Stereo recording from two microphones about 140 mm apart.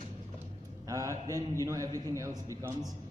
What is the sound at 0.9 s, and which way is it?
A man's voice, 25° right (ahead or behind).